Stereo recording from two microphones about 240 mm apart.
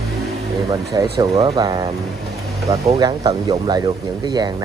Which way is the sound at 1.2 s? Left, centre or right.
Centre.